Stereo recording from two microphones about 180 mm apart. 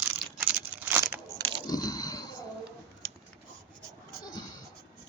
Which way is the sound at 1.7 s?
20° left (ahead or behind).